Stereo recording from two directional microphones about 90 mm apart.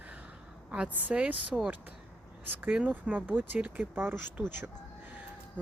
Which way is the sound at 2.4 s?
20° right (ahead or behind).